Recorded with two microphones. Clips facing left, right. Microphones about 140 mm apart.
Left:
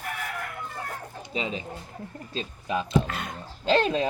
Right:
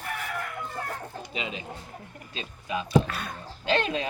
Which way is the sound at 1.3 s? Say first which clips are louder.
Left 5 dB; 35° left (ahead or behind).